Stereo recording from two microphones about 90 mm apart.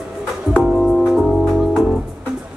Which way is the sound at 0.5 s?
5° right (ahead or behind).